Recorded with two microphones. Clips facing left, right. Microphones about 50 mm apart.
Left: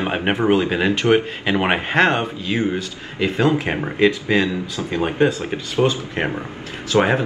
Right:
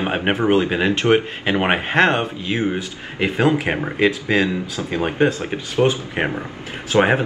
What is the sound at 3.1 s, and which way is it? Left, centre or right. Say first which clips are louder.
Speech: even; right.